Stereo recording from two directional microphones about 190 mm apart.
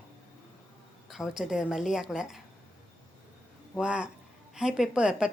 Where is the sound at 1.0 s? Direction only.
Centre (ahead or behind).